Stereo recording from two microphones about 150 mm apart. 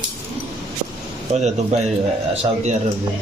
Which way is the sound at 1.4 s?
50° right (ahead or behind).